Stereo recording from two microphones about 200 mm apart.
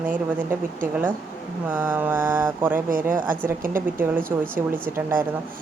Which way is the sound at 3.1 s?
40° right (ahead or behind).